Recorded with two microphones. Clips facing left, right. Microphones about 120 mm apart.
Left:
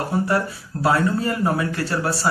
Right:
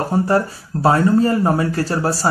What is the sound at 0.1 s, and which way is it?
Speech, 40° right (ahead or behind).